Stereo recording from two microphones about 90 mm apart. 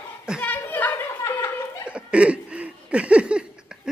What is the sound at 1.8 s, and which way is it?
Laughter, 15° right (ahead or behind).